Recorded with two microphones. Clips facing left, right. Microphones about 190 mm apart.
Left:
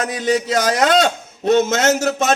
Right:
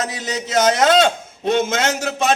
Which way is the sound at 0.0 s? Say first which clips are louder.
Left 6 dB; 25° right (ahead or behind).